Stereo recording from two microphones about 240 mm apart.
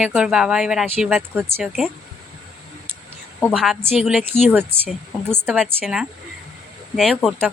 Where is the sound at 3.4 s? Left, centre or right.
Centre.